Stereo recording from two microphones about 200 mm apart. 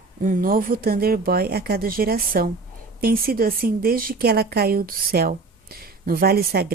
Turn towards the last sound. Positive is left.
turn(degrees=-50)  # may be behind; listen again after turning